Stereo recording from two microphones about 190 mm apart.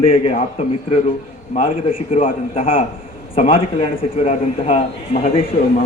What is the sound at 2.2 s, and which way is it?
A man's voice, 30° left (ahead or behind).